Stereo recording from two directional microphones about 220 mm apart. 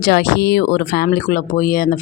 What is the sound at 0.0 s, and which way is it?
Speech, 45° left (ahead or behind).